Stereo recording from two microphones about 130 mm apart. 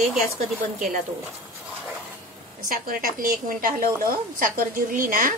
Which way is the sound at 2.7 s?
90° right.